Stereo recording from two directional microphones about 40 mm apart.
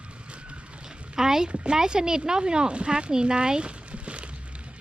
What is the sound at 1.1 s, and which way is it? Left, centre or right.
Speech, centre.